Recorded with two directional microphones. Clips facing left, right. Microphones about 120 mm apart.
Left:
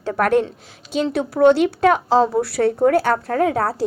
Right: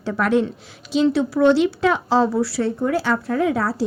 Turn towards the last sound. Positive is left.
turn(degrees=50)  # may be behind; listen again after turning